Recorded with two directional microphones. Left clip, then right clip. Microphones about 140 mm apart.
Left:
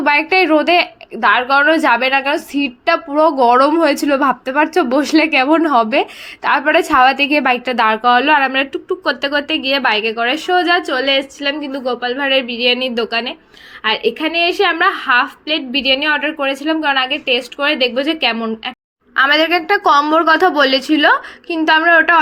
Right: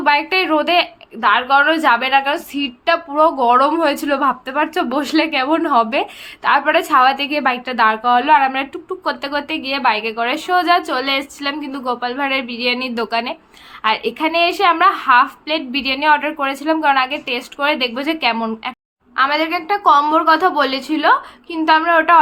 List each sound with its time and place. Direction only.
0.0 s a woman's voice: 35° left (ahead or behind); by 18.3 s 10° left (ahead or behind)
19.1 s a woman's voice: 40° left (ahead or behind)